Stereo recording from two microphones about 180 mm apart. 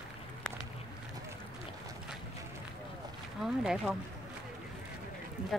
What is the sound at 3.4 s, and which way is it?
Speech, centre (ahead or behind).